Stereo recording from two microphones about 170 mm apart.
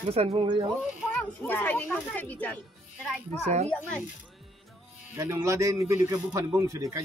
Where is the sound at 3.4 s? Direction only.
40° right (ahead or behind).